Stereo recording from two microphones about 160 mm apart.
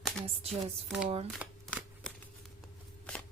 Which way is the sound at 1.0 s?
40° right (ahead or behind).